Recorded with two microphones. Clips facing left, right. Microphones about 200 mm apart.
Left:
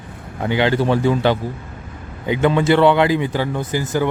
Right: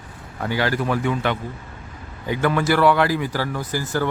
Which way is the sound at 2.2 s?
20° left (ahead or behind).